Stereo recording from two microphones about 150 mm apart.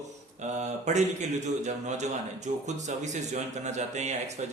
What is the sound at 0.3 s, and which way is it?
A man's voice, 50° right (ahead or behind).